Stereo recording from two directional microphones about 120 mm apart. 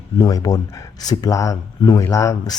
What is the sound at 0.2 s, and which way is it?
Speech, 30° left (ahead or behind).